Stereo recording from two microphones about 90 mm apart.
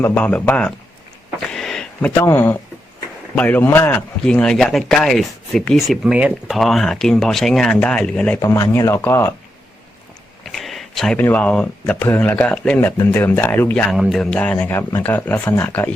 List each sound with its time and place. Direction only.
0.1 s speech: 15° left (ahead or behind)
1.5 s a sound: 5° left (ahead or behind)
2.0 s speech: 20° left (ahead or behind)
3.6 s speech: 25° left (ahead or behind)
4.3 s speech: 10° left (ahead or behind)
5.9 s speech: 10° right (ahead or behind)
6.5 s speech: centre (ahead or behind)
8.4 s speech: 40° left (ahead or behind)
10.4 s a sound: centre (ahead or behind)
11.2 s speech: 20° left (ahead or behind)
13.9 s speech: centre (ahead or behind)
14.3 s speech: 15° left (ahead or behind)
14.7 s speech: 25° left (ahead or behind)